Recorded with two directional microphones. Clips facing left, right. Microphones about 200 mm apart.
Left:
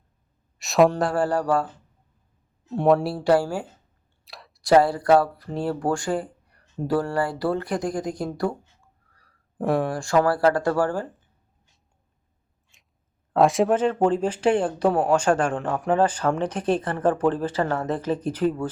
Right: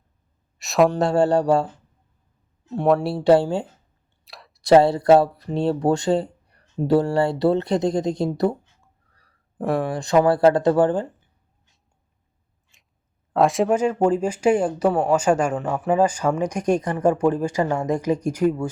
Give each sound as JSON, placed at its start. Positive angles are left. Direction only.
{"t": 0.6, "sound": "a sound", "side_deg": 0}
{"t": 0.9, "sound": "speech", "side_deg": -25}
{"t": 2.6, "sound": "speech", "side_deg": 0}
{"t": 3.2, "sound": "speech", "side_deg": -25}
{"t": 4.3, "sound": "clicking", "side_deg": 0}
{"t": 4.6, "sound": "speech", "side_deg": -25}
{"t": 9.2, "sound": "a sound", "side_deg": 0}
{"t": 10.2, "sound": "speech", "side_deg": -20}
{"t": 12.7, "sound": "a sound", "side_deg": 0}
{"t": 13.3, "sound": "speech", "side_deg": 0}